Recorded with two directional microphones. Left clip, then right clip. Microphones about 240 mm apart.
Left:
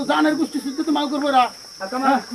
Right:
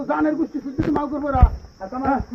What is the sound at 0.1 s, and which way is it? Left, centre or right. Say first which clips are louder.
Speech: left 3 dB; left.